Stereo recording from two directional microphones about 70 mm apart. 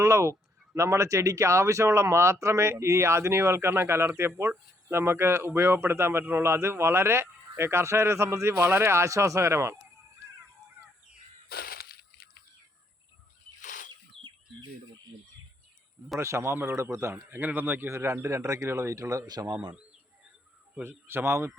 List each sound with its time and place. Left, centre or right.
0.0 s speech: right
14.2 s bird: centre
16.2 s speech: right
17.4 s a man's voice: right
17.8 s speech: right
19.3 s speech: right
20.8 s speech: right